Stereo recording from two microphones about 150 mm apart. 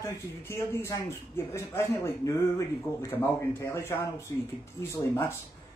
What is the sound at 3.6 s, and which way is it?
Speech, 15° left (ahead or behind).